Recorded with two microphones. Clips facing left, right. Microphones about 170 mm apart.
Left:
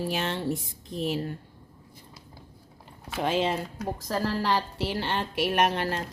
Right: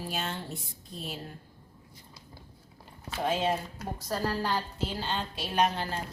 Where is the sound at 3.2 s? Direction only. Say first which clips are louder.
Left 2 dB; 90° left.